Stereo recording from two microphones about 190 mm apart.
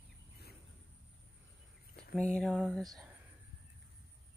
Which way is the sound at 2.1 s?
5° left (ahead or behind).